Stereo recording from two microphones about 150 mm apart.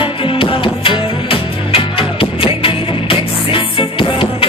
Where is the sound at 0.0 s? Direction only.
35° left (ahead or behind).